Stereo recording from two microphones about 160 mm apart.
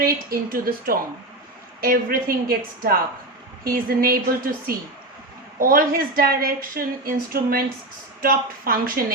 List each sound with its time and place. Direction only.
0.0 s a woman's voice: 65° right (ahead or behind)